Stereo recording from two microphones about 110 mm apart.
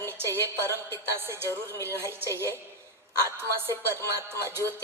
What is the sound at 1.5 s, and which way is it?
Speech, 25° left (ahead or behind).